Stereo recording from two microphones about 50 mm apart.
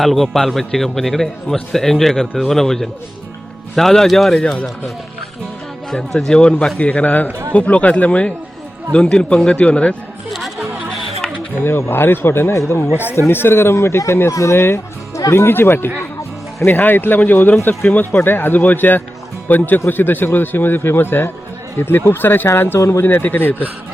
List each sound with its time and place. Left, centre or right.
0.0 s a man's voice: centre
4.4 s a man's voice: centre
5.9 s a man's voice: centre
6.2 s a man's voice: centre
6.7 s speech: left
11.6 s a man's voice: left
12.5 s speech: left
13.1 s speech: left
14.5 s a man's voice: left